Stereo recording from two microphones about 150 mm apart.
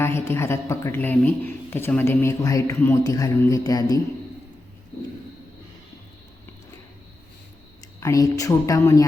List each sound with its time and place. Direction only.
0.0 s speech: 15° left (ahead or behind)
8.0 s speech: 20° left (ahead or behind)